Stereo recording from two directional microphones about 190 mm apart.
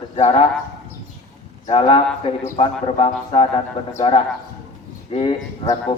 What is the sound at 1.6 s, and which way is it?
Speech, 30° left (ahead or behind).